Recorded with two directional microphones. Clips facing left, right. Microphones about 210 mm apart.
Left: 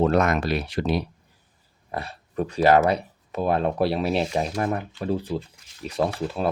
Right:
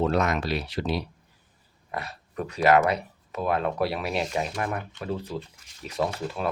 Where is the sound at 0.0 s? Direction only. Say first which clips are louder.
Left 4 dB; 50° left (ahead or behind).